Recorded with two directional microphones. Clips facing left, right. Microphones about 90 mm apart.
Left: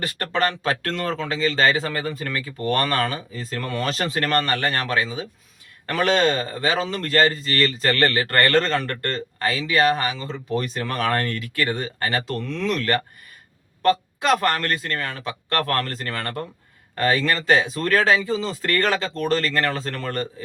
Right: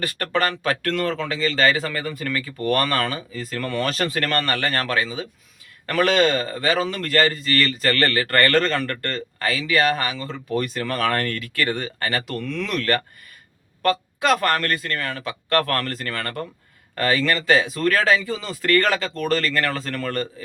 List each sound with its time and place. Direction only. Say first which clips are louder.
0.0 s speech: even; 30° left (ahead or behind)